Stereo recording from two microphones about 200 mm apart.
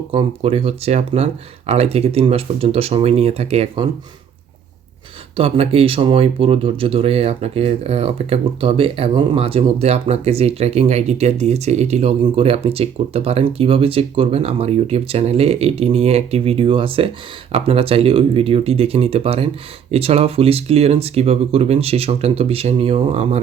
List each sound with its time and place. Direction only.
0.1 s speech: 30° right (ahead or behind)
5.4 s speech: 30° right (ahead or behind)